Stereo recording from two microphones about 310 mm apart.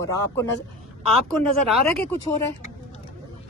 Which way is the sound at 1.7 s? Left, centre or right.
Centre.